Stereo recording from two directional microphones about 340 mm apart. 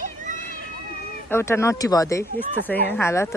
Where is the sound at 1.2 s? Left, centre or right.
Centre.